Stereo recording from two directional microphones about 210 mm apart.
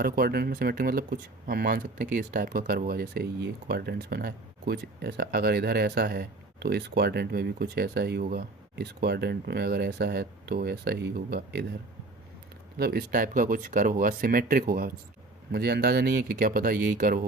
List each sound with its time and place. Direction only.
0.0 s speech: 45° right (ahead or behind)
12.7 s speech: 50° right (ahead or behind)